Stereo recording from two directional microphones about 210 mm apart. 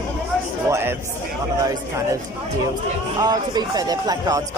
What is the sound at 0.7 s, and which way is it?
Speech, 10° right (ahead or behind).